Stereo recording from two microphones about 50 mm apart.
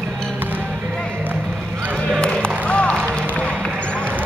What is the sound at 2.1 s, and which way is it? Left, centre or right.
Music, centre.